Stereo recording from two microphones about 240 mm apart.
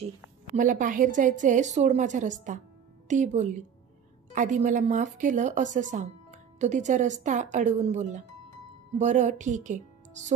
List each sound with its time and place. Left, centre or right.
0.6 s a woman's voice: right